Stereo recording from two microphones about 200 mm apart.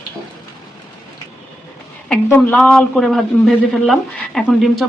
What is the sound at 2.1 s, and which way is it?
A man's voice, 10° left (ahead or behind).